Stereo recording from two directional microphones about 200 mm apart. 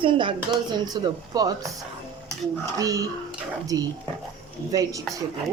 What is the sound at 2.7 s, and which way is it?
A woman's voice, 15° right (ahead or behind).